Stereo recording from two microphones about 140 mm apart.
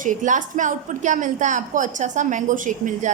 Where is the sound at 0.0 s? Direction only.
65° right (ahead or behind).